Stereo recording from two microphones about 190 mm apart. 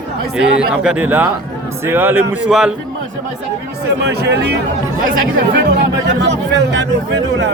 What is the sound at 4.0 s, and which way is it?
Speech, 60° right (ahead or behind).